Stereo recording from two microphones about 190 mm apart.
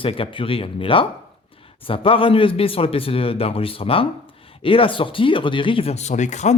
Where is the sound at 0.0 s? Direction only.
30° left (ahead or behind).